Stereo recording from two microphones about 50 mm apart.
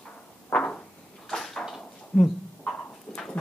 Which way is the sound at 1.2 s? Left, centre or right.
Centre.